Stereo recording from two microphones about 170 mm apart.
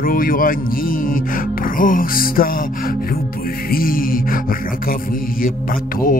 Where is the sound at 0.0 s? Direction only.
55° left (ahead or behind).